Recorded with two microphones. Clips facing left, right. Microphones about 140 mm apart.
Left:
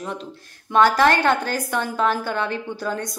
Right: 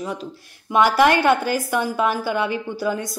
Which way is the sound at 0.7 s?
15° right (ahead or behind).